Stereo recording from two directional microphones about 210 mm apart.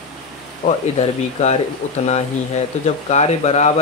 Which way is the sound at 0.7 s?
30° left (ahead or behind).